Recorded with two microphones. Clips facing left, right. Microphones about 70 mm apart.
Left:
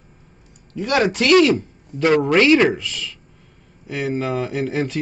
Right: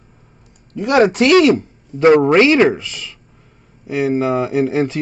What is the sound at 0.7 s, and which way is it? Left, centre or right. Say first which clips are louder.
Speech: right 6 dB; right.